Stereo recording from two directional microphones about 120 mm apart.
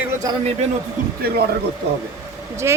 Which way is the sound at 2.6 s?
20° right (ahead or behind).